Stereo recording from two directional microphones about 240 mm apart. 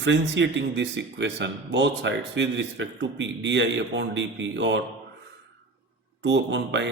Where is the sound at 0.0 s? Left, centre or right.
Right.